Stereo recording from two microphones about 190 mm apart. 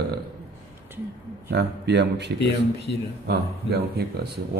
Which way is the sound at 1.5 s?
60° right (ahead or behind).